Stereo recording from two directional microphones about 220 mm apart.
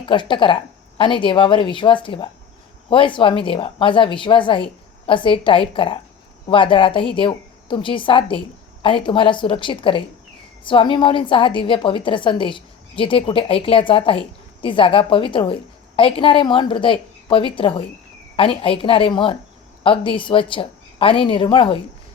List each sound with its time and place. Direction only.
0.0 s a woman's voice: 20° left (ahead or behind)